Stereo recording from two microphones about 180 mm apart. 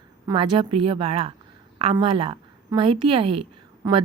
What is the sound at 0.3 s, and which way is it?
A woman's voice, 25° right (ahead or behind).